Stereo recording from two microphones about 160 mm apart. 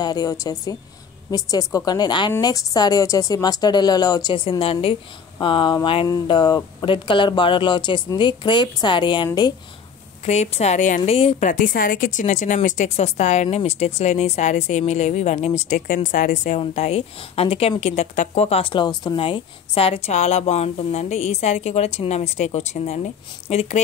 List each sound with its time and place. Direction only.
0.0 s speech: 25° left (ahead or behind)
10.2 s a woman's voice: 45° left (ahead or behind)
11.4 s a woman's voice: 55° left (ahead or behind); by 23.8 s 40° left (ahead or behind)